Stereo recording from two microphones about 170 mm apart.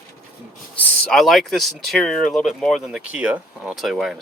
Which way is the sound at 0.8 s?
5° left (ahead or behind).